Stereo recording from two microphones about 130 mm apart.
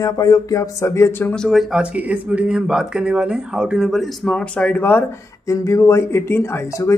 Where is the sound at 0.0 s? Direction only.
25° left (ahead or behind).